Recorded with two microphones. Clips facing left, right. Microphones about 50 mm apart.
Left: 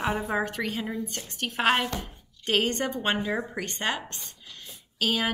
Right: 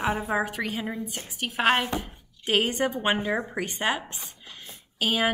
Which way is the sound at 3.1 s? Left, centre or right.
Right.